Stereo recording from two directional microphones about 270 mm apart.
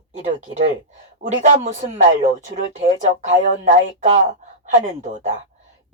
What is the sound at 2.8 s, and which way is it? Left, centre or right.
Speech, right.